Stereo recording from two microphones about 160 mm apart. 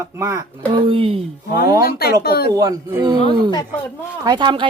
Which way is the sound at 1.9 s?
75° left (ahead or behind).